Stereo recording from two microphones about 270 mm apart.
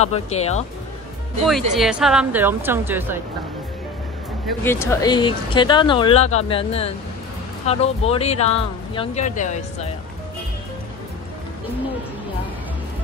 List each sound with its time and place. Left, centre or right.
0.0 s speech: left
1.4 s speech: centre
4.5 s speech: centre; by 9.6 s left